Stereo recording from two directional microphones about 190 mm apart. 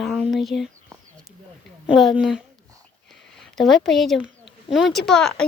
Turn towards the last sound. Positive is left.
turn(degrees=5)  # may be behind; listen again after turning